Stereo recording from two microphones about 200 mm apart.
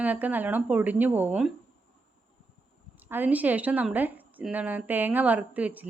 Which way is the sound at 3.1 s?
10° right (ahead or behind).